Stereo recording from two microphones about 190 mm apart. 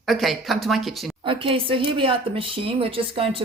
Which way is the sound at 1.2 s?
30° right (ahead or behind).